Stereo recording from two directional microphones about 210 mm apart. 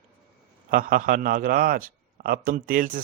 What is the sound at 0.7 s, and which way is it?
A man's voice, 40° right (ahead or behind).